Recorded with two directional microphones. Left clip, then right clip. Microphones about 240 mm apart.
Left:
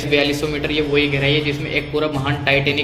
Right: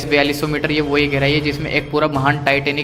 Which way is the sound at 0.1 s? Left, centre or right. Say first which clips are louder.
Right 2 dB; right.